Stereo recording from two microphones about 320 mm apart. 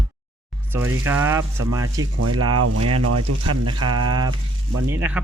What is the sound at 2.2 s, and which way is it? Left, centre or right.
Speech, right.